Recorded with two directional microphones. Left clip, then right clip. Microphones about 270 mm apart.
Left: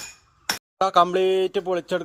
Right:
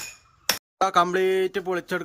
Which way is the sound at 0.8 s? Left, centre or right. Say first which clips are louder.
Left 2 dB; centre.